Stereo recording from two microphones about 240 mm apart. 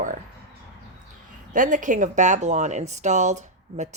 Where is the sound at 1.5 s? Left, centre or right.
Right.